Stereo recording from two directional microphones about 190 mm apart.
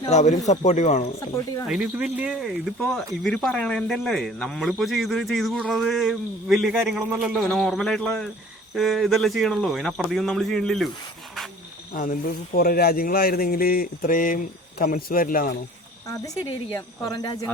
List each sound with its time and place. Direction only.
0.1 s speech: 40° left (ahead or behind)
1.6 s speech: 5° right (ahead or behind)
11.9 s speech: 45° left (ahead or behind)
16.0 s a woman's voice: 15° left (ahead or behind)